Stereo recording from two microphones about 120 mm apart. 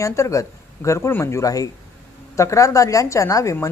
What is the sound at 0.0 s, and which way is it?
A woman's voice, 25° left (ahead or behind).